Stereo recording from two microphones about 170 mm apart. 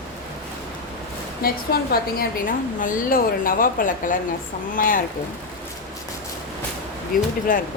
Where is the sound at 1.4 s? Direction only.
60° left (ahead or behind).